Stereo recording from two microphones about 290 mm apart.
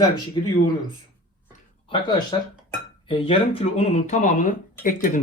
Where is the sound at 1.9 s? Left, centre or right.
Centre.